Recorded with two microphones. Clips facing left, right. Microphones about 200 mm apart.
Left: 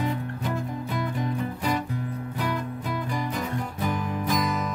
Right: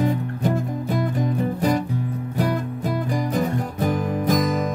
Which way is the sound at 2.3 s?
45° right (ahead or behind).